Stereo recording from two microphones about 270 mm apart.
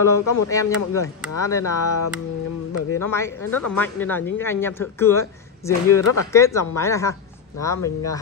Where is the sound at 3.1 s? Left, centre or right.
Centre.